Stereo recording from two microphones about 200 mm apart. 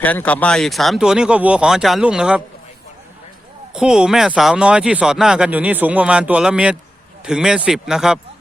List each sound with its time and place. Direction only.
0.0 s speech: 10° left (ahead or behind)
3.8 s speech: 5° right (ahead or behind)